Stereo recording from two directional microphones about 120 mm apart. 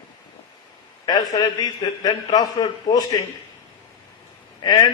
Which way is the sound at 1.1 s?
35° left (ahead or behind).